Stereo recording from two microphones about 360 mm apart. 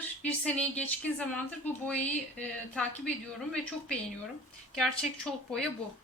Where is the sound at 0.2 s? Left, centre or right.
Centre.